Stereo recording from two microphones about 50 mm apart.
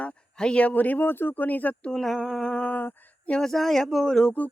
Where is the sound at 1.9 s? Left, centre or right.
Centre.